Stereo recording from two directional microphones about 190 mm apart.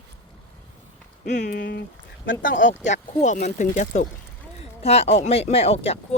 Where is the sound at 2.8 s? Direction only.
40° left (ahead or behind).